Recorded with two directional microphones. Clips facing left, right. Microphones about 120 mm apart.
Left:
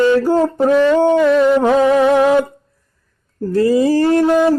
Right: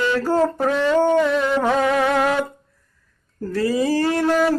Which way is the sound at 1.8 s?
30° left (ahead or behind).